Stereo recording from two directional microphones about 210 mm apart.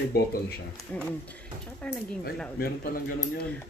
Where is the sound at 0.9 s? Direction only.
5° left (ahead or behind).